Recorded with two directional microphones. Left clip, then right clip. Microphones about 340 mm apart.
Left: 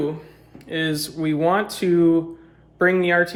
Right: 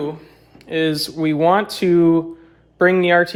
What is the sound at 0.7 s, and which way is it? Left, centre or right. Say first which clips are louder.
Speech: right 5 dB; right.